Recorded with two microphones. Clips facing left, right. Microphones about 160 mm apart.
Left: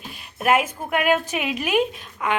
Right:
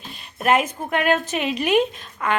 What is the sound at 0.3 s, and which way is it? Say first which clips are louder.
Speech: right 1 dB; 5° left (ahead or behind).